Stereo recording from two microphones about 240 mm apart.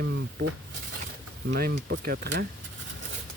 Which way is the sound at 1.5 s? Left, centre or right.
Right.